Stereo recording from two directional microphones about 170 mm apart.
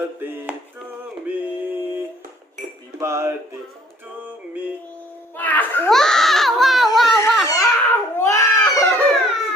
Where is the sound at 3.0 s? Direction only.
15° right (ahead or behind).